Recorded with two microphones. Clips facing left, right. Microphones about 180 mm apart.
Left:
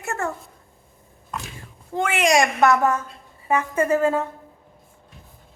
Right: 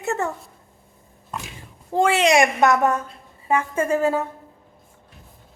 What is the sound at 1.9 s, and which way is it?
A woman's voice, 30° right (ahead or behind).